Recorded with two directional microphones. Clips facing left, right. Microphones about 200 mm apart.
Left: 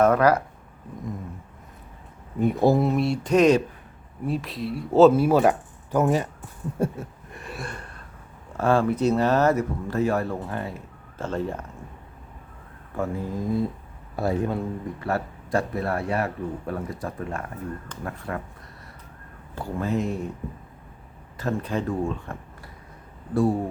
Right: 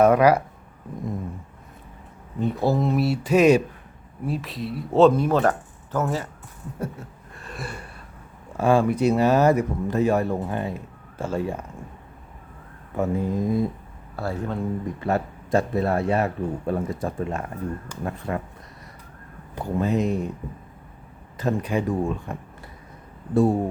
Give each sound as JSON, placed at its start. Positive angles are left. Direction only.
{"t": 0.0, "sound": "speech", "side_deg": -10}
{"t": 2.4, "sound": "speech", "side_deg": 15}
{"t": 2.8, "sound": "speech", "side_deg": -5}
{"t": 6.8, "sound": "a sound", "side_deg": 30}
{"t": 7.5, "sound": "a sound", "side_deg": -5}
{"t": 8.5, "sound": "speech", "side_deg": -10}
{"t": 13.0, "sound": "a man's voice", "side_deg": -20}
{"t": 14.2, "sound": "speech", "side_deg": 15}
{"t": 15.0, "sound": "a man's voice", "side_deg": -20}
{"t": 19.5, "sound": "a man's voice", "side_deg": -20}
{"t": 21.3, "sound": "a man's voice", "side_deg": -15}